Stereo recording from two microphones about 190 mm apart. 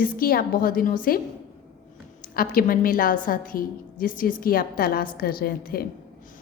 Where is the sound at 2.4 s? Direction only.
50° left (ahead or behind).